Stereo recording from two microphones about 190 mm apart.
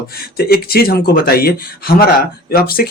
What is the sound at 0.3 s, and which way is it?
Speech, 55° left (ahead or behind).